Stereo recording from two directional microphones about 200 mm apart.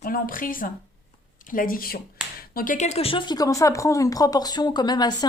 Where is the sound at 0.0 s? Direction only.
45° left (ahead or behind).